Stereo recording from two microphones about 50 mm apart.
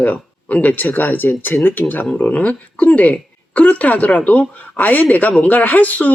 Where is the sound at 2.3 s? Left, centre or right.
Left.